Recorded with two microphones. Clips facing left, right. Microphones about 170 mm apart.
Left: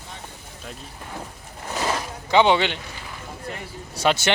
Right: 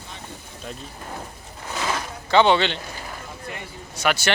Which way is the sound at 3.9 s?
25° left (ahead or behind).